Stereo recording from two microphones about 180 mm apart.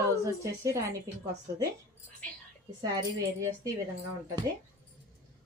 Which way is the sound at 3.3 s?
15° right (ahead or behind).